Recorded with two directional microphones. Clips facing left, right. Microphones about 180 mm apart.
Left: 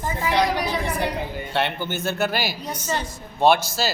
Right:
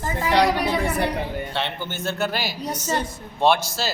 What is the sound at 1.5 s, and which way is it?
A man's voice, 5° left (ahead or behind).